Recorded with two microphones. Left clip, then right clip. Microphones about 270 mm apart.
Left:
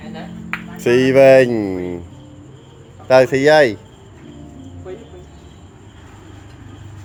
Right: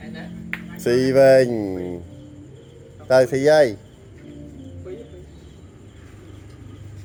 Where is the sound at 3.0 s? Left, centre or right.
Left.